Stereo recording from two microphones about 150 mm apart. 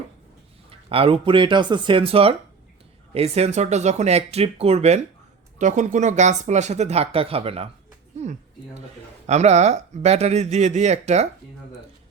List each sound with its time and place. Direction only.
0.7 s speech: 40° right (ahead or behind)